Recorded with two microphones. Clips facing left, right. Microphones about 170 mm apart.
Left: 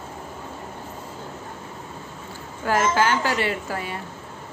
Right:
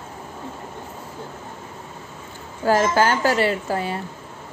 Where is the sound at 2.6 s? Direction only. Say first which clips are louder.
Right 3 dB; 35° right (ahead or behind).